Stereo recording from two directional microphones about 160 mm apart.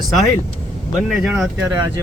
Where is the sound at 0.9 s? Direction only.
Centre (ahead or behind).